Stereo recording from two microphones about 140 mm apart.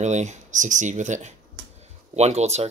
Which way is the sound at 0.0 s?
55° right (ahead or behind).